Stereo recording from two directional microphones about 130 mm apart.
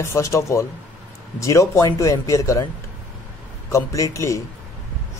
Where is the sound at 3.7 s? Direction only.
25° left (ahead or behind).